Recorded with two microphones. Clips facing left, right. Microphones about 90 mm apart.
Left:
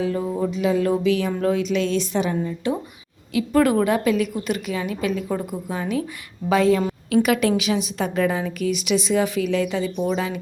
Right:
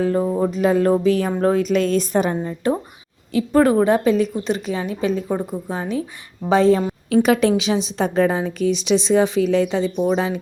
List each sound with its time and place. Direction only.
0.0 s a woman's voice: 35° right (ahead or behind)
3.3 s a woman's voice: 30° right (ahead or behind)